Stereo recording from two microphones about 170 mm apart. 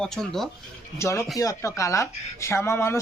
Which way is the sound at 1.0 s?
15° left (ahead or behind).